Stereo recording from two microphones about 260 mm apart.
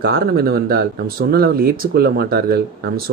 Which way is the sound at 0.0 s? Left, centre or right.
Right.